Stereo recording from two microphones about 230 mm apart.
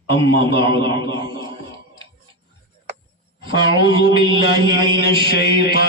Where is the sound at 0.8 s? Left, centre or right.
Right.